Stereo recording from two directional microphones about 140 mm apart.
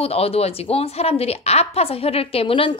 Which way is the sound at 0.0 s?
45° left (ahead or behind).